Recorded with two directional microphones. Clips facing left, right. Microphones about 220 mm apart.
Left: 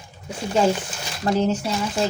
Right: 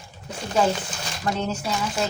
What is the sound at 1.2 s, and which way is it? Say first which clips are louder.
Speech: left 6 dB; 35° left (ahead or behind).